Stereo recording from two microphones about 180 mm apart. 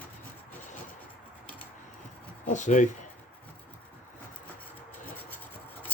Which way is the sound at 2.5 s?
45° left (ahead or behind).